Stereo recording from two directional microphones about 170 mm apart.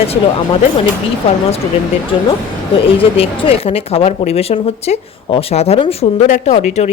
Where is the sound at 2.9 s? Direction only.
35° left (ahead or behind).